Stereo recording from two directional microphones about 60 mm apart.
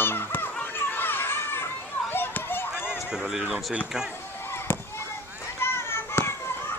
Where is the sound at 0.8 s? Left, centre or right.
Left.